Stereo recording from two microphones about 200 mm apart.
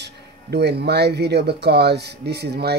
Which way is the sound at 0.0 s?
55° right (ahead or behind).